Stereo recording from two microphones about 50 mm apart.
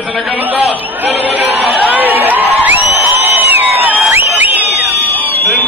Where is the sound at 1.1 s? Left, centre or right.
Right.